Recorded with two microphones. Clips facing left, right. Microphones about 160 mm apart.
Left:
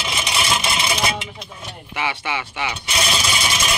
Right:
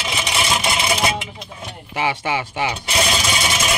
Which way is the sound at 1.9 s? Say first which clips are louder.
Right 4 dB; 40° right (ahead or behind).